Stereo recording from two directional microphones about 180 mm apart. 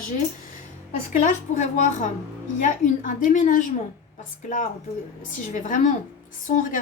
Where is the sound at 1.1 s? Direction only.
45° left (ahead or behind).